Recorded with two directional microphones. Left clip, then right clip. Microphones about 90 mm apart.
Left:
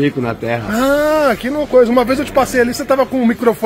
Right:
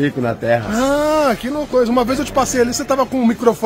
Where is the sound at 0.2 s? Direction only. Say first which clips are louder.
Right 2 dB; 45° right (ahead or behind).